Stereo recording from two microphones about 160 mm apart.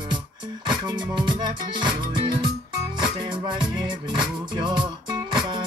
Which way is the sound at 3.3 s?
30° right (ahead or behind).